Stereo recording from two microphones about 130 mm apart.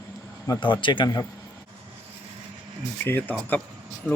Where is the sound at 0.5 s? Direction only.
40° left (ahead or behind).